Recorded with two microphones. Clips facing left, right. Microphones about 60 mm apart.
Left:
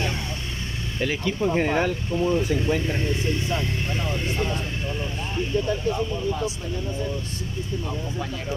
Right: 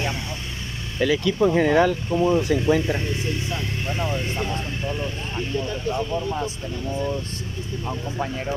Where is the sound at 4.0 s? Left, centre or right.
Centre.